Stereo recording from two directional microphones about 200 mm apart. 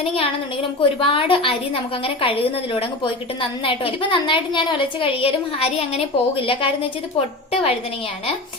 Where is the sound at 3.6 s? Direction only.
25° left (ahead or behind).